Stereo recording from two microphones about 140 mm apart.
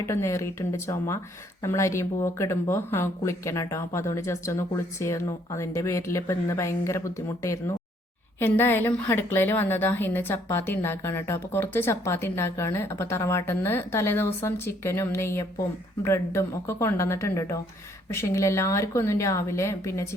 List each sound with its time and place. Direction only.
0.1 s a woman's voice: 20° left (ahead or behind)